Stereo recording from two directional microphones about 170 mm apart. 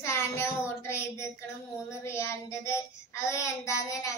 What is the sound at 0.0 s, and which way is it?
Child singing, 15° left (ahead or behind).